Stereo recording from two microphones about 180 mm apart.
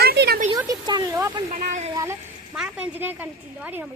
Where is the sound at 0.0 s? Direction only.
60° right (ahead or behind).